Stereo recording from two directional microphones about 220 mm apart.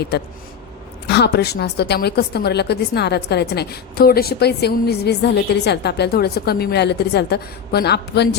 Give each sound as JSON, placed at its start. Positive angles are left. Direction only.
{"t": 0.1, "sound": "a woman's voice", "side_deg": 50}